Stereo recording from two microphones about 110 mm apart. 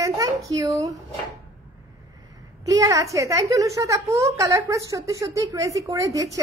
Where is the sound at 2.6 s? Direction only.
30° right (ahead or behind).